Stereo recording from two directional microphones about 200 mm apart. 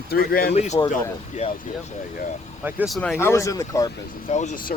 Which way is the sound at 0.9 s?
35° left (ahead or behind).